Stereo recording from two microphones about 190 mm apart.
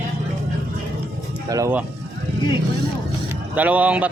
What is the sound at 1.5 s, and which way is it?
Speech, 15° right (ahead or behind).